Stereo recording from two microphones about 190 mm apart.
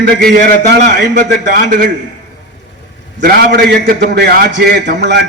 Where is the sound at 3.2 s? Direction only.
55° right (ahead or behind).